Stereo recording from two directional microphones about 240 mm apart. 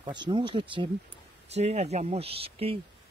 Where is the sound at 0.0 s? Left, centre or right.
Centre.